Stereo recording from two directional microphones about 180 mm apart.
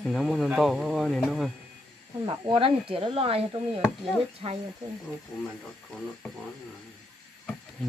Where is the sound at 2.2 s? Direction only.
25° right (ahead or behind).